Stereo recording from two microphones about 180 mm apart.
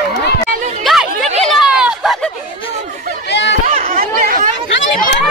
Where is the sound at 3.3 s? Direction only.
75° left (ahead or behind).